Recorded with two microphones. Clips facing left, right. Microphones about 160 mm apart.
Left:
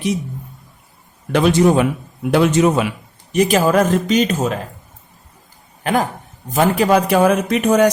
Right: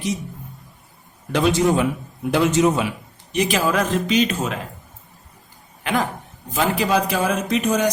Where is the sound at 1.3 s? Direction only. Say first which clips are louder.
Left 4 dB; 60° left (ahead or behind).